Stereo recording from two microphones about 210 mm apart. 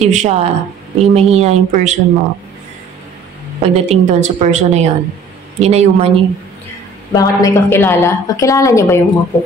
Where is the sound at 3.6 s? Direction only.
30° right (ahead or behind).